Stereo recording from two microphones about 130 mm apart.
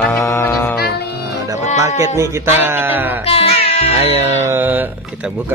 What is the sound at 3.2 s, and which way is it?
Cat, 50° left (ahead or behind).